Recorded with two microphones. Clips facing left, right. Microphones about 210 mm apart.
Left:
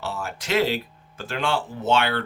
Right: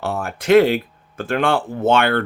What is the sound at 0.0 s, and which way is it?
Speech, 55° right (ahead or behind).